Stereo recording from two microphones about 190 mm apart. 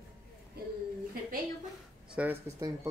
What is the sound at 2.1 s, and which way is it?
Speech, 10° right (ahead or behind).